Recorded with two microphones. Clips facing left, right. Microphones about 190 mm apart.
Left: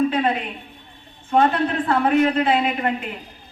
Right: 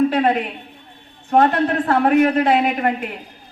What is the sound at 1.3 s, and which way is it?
A woman's voice, 50° right (ahead or behind).